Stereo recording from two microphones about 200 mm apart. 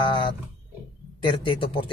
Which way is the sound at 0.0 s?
25° left (ahead or behind).